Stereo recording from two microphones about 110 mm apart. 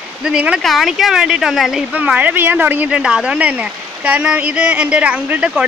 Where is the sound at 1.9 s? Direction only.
15° right (ahead or behind).